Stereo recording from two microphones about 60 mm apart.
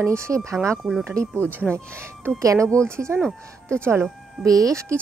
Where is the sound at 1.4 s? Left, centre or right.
Left.